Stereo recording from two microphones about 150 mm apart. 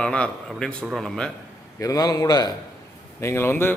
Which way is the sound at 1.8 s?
25° left (ahead or behind).